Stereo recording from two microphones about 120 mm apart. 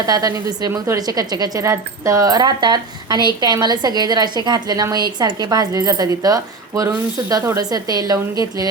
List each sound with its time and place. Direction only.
0.0 s a woman's voice: 30° right (ahead or behind)